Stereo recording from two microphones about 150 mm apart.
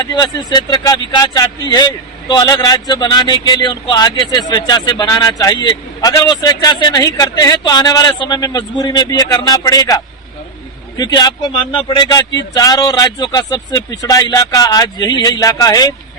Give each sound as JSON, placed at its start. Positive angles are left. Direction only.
{"t": 0.0, "sound": "speech", "side_deg": 30}
{"t": 10.9, "sound": "speech", "side_deg": 25}